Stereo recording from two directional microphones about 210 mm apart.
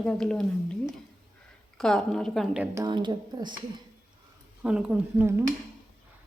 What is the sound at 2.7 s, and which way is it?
Speech, 20° right (ahead or behind).